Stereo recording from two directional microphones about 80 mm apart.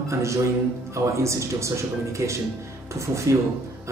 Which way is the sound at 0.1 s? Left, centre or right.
Right.